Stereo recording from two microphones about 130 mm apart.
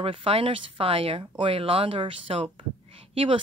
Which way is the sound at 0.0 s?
45° right (ahead or behind).